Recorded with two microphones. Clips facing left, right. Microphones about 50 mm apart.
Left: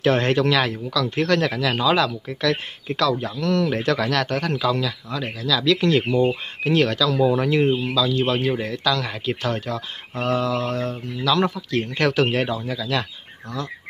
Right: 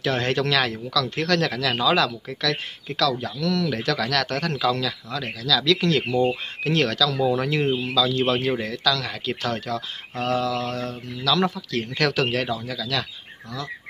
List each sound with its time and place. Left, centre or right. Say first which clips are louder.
0.0 s speech: left 5 dB; left
0.3 s speech: left 3 dB; centre
2.4 s speech: left 4 dB; left
4.1 s speech: left 2 dB; centre
8.6 s speech: left 1 dB; left